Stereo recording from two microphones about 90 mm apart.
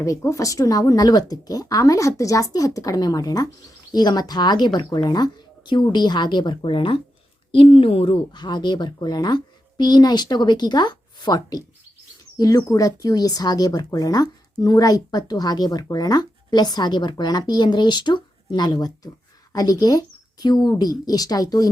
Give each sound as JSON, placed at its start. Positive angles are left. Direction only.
{"t": 0.0, "sound": "a woman's voice", "side_deg": 35}
{"t": 7.5, "sound": "a woman's voice", "side_deg": 90}
{"t": 8.3, "sound": "speech", "side_deg": 55}